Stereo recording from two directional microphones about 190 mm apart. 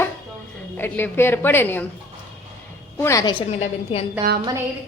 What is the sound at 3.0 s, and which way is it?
Speech, 15° left (ahead or behind).